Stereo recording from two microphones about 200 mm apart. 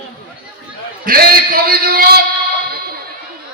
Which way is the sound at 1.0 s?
45° right (ahead or behind).